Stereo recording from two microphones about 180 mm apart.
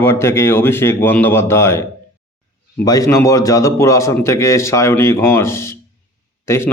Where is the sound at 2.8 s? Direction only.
20° left (ahead or behind).